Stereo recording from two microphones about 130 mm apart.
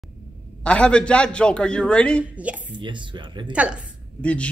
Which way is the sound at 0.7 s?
10° left (ahead or behind).